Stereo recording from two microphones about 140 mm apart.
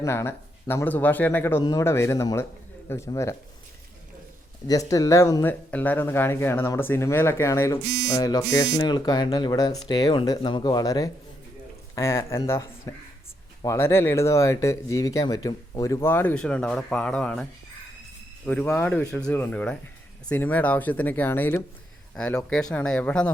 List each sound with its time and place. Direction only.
0.0 s speech: 20° left (ahead or behind)
4.6 s speech: 25° left (ahead or behind); by 17.4 s 5° left (ahead or behind)
18.4 s speech: 10° left (ahead or behind)